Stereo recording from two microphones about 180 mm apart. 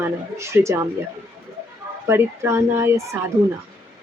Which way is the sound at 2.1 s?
15° right (ahead or behind).